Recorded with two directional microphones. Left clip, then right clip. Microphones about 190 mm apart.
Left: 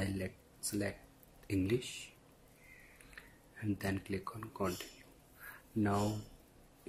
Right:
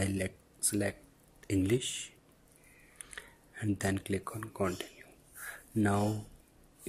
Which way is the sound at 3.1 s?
20° right (ahead or behind).